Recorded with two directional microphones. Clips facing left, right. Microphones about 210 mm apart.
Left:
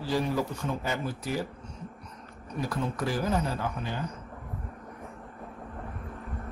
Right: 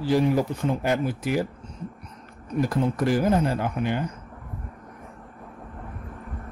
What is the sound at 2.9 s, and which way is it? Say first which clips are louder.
Speech: right 7 dB; 65° right (ahead or behind).